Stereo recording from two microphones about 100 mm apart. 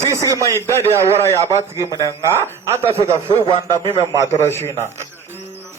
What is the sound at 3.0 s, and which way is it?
Speech, 30° right (ahead or behind).